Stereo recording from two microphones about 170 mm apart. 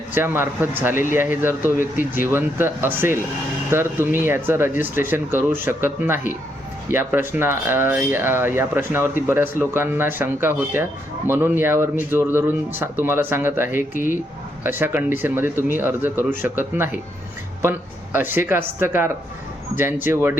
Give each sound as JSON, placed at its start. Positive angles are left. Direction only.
{"t": 0.1, "sound": "speech", "side_deg": -10}
{"t": 13.9, "sound": "speech", "side_deg": 50}
{"t": 14.6, "sound": "speech", "side_deg": -10}